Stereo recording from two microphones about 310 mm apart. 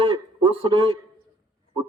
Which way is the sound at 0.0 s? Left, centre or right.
Centre.